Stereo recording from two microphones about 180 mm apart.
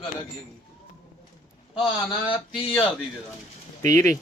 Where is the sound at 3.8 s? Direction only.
15° left (ahead or behind).